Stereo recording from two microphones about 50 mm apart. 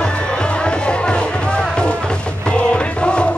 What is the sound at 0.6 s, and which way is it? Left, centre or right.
Music, centre.